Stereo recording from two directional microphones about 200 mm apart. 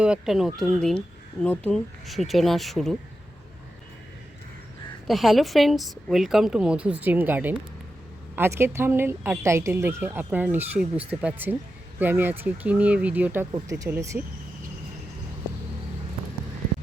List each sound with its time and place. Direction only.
0.0 s speech: 5° right (ahead or behind)
5.0 s speech: centre (ahead or behind)